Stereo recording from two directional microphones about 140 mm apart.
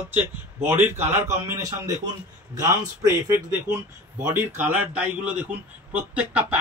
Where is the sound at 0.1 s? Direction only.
15° right (ahead or behind).